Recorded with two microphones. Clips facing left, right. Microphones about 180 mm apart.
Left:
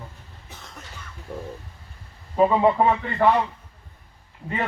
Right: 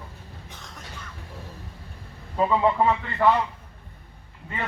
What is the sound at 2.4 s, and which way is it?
Speech, 20° left (ahead or behind).